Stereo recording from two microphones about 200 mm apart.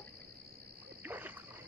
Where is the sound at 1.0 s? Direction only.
10° right (ahead or behind).